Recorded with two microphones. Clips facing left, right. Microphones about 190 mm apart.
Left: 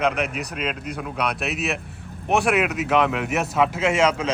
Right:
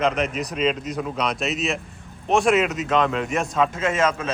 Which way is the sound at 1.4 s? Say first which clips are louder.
Right 1 dB; 60° left (ahead or behind).